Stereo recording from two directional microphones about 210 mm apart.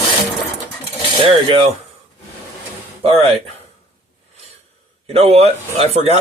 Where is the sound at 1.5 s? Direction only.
25° right (ahead or behind).